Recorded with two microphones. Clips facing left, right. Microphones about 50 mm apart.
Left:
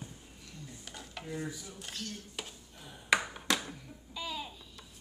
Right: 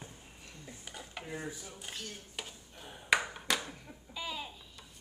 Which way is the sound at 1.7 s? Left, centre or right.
Centre.